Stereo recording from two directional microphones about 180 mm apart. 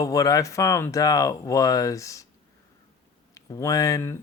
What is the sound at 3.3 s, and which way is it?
Speech, 15° left (ahead or behind).